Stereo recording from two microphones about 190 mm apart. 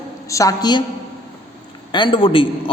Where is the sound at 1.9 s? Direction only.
25° left (ahead or behind).